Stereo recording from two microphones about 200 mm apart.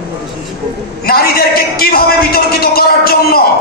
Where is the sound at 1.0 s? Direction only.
50° left (ahead or behind).